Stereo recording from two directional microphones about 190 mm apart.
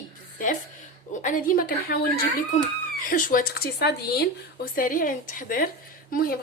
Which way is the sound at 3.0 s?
45° left (ahead or behind).